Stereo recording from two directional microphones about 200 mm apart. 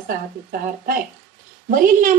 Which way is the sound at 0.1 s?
45° right (ahead or behind).